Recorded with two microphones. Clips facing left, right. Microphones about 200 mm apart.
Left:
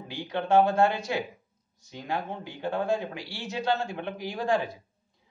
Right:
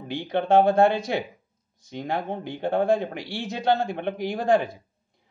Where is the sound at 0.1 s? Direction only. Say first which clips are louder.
Right 4 dB; 60° right (ahead or behind).